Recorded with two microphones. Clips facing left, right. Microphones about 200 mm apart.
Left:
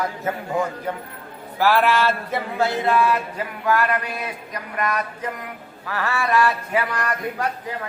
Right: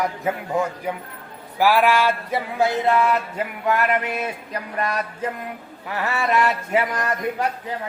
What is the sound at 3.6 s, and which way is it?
Speech, 20° right (ahead or behind).